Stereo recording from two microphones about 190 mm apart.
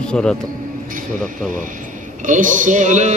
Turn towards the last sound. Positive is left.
turn(degrees=-40)  # may be behind; listen again after turning